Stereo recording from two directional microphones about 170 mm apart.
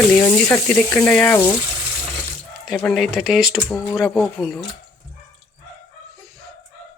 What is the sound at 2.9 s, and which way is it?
Speech, centre (ahead or behind).